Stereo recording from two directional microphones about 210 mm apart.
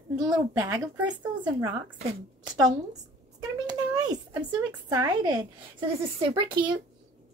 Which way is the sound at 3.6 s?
20° right (ahead or behind).